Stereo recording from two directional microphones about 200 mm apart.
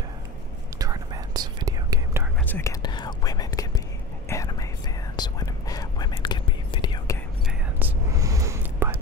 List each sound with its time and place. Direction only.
0.7 s whispering: 20° right (ahead or behind)
2.4 s whispering: 10° left (ahead or behind)
2.8 s whispering: 20° left (ahead or behind)
8.2 s whispering: 15° right (ahead or behind)